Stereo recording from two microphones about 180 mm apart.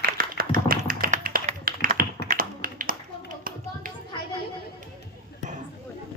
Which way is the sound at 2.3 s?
55° right (ahead or behind).